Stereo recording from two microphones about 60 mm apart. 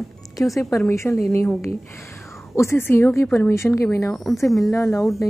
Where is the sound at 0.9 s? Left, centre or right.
Left.